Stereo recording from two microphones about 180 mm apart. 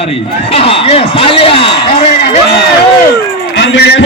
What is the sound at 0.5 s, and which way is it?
A man's voice, 30° left (ahead or behind).